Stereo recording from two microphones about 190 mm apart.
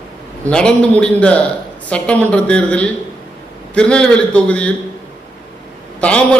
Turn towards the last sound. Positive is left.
turn(degrees=5)  # may be behind; listen again after turning